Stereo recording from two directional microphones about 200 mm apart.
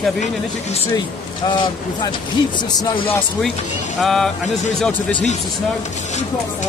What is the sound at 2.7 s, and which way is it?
Speech, 25° left (ahead or behind).